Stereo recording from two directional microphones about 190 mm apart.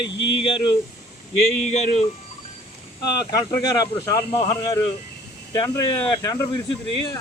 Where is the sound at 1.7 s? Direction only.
35° left (ahead or behind).